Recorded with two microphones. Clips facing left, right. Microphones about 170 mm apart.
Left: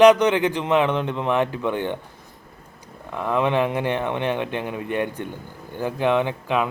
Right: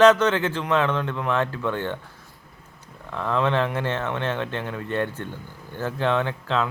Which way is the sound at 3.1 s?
15° left (ahead or behind).